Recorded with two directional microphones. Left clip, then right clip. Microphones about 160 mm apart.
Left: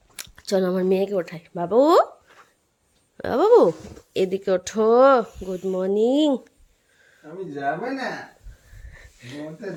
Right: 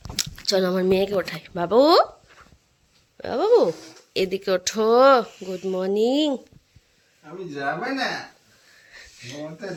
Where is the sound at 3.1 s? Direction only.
35° left (ahead or behind).